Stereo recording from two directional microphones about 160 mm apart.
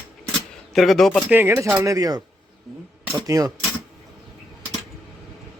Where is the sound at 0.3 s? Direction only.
Centre (ahead or behind).